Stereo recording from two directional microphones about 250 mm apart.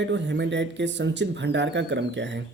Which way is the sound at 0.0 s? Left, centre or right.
Right.